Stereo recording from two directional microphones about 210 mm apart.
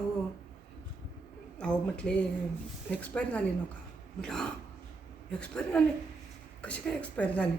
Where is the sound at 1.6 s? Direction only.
5° left (ahead or behind).